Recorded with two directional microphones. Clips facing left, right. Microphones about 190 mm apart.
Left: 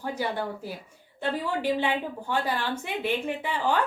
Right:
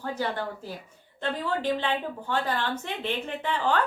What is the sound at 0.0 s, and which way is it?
A woman's voice, 10° left (ahead or behind).